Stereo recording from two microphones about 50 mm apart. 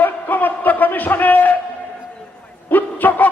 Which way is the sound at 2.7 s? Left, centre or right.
Left.